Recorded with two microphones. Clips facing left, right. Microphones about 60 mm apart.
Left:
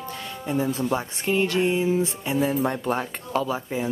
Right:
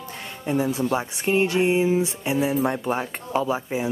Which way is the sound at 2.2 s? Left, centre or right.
Centre.